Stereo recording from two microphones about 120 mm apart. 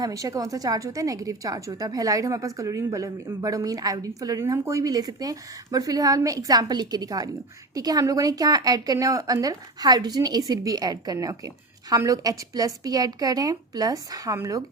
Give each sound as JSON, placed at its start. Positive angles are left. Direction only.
{"t": 0.0, "sound": "a woman's voice", "side_deg": -30}